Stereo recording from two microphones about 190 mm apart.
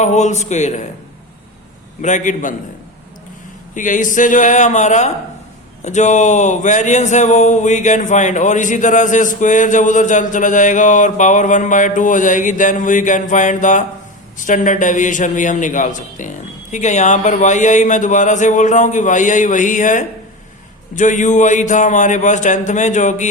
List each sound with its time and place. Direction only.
0.0 s speech: 40° left (ahead or behind)
2.0 s speech: 40° left (ahead or behind)
3.8 s a man's voice: 40° left (ahead or behind)